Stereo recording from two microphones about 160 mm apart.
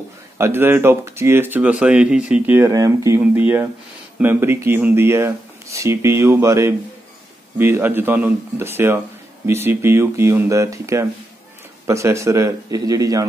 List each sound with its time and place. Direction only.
0.4 s speech: 15° right (ahead or behind)